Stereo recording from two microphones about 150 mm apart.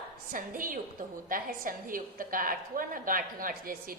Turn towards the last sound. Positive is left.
turn(degrees=-70)  # may be behind; listen again after turning